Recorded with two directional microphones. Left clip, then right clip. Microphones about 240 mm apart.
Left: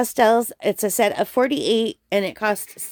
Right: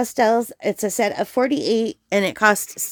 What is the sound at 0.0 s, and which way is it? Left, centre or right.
A woman's voice, centre.